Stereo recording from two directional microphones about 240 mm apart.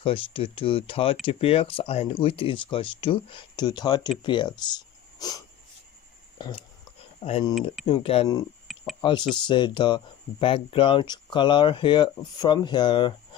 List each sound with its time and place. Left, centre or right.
0.0 s speech: left
6.3 s burping: centre
7.2 s speech: left
8.7 s a sound: centre
9.5 s speech: centre